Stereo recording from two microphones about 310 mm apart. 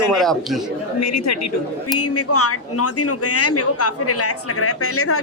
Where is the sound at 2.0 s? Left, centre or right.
Left.